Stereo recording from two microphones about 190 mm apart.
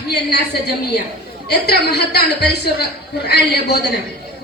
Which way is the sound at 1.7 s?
60° left (ahead or behind).